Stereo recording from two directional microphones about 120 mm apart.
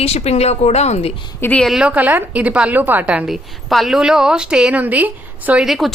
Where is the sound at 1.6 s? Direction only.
5° right (ahead or behind).